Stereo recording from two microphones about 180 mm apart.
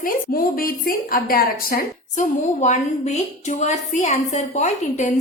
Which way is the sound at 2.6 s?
40° left (ahead or behind).